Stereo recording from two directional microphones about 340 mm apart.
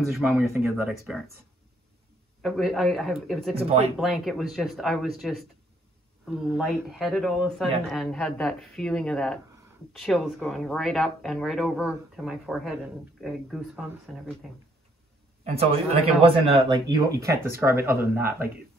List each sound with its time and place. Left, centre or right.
0.1 s speech: centre
2.4 s speech: centre
3.5 s speech: centre
4.0 s speech: centre
15.4 s speech: centre